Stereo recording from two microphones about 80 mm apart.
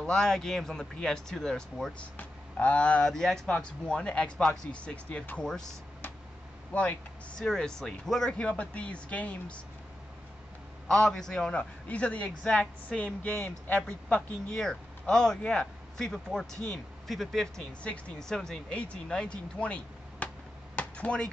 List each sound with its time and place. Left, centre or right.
0.0 s a man's voice: centre
2.1 s a man's voice: centre
5.4 s a man's voice: centre
6.7 s a man's voice: centre
10.9 s a man's voice: centre
20.7 s a sound: centre